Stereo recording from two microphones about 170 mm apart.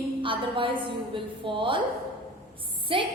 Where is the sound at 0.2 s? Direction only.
30° right (ahead or behind).